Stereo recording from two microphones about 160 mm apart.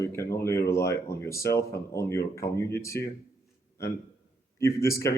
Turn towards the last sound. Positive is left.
turn(degrees=20)  # may be behind; listen again after turning